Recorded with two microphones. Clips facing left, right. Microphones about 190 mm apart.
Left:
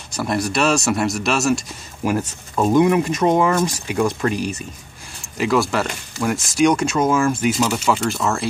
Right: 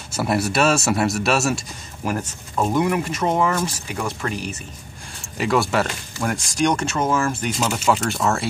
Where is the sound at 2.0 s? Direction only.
10° left (ahead or behind).